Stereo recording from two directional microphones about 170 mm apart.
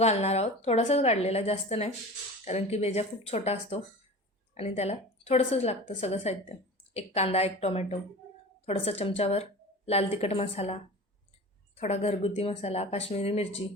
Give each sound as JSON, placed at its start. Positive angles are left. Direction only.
{"t": 0.0, "sound": "a woman's voice", "side_deg": 40}
{"t": 11.8, "sound": "a woman's voice", "side_deg": 40}